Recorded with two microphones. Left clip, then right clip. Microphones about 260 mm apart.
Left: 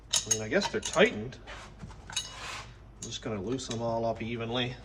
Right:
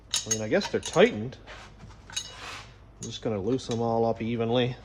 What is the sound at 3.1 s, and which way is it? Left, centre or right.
Speech, right.